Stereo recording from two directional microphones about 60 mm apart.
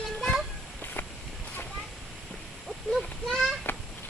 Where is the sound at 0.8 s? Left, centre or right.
Left.